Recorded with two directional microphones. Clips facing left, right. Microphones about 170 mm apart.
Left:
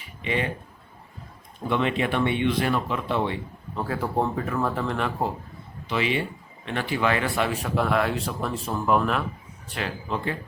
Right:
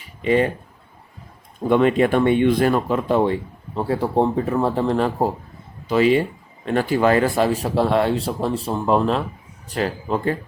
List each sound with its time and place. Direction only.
0.2 s speech: 40° right (ahead or behind)
1.6 s speech: 45° right (ahead or behind)
3.8 s speech: 30° right (ahead or behind)
9.6 s speech: 40° right (ahead or behind)